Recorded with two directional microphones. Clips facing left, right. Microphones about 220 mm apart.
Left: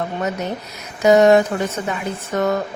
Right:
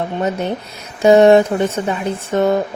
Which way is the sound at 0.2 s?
30° right (ahead or behind).